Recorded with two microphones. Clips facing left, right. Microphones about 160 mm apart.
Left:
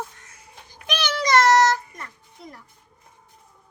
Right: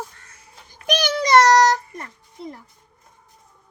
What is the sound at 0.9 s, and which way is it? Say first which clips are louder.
Child singing: right 4 dB; 40° right (ahead or behind).